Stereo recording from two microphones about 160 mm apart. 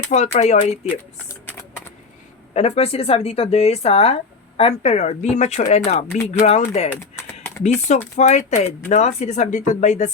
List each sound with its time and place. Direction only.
0.1 s speech: 45° left (ahead or behind)
2.5 s speech: 40° left (ahead or behind)
6.9 s typing: 15° left (ahead or behind)
7.6 s speech: 45° left (ahead or behind)